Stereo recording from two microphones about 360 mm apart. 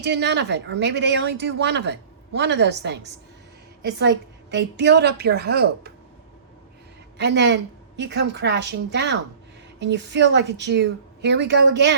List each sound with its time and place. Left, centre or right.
0.0 s speech: right
7.2 s speech: right